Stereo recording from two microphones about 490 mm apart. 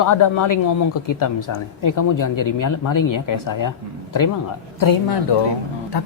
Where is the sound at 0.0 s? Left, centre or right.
Left.